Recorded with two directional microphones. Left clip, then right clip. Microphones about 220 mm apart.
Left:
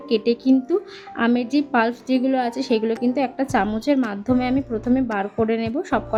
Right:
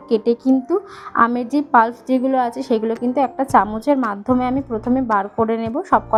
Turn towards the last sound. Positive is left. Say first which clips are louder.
# right 5 dB
turn(degrees=0)  # may be behind; listen again after turning